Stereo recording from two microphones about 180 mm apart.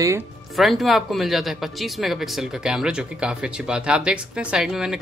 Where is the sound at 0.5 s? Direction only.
Centre (ahead or behind).